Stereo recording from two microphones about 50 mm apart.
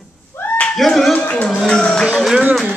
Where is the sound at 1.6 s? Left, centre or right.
Centre.